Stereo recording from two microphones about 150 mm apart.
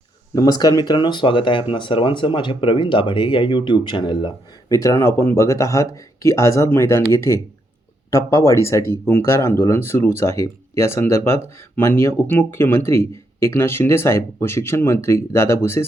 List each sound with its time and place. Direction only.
0.3 s speech: 25° left (ahead or behind)
4.7 s speech: 20° left (ahead or behind)